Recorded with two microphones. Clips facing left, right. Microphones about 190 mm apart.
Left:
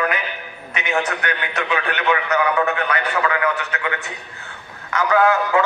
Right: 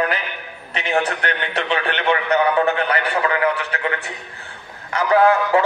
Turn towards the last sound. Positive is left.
turn(degrees=-30)  # may be behind; listen again after turning